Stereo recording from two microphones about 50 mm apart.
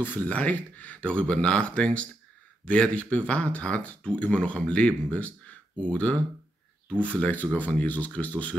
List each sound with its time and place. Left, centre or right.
0.0 s speech: left
7.2 s speech: left